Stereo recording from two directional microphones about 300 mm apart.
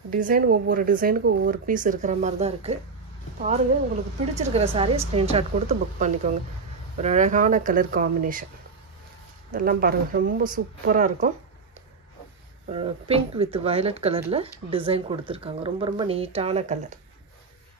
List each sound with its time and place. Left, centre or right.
0.1 s speech: right
9.5 s speech: right
12.6 s speech: centre